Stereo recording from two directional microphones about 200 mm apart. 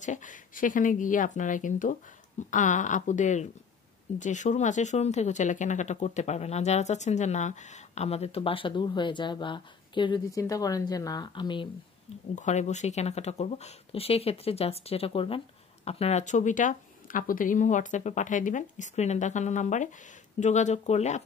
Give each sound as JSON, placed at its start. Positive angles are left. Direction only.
{"t": 0.0, "sound": "speech", "side_deg": 40}
{"t": 12.4, "sound": "speech", "side_deg": 35}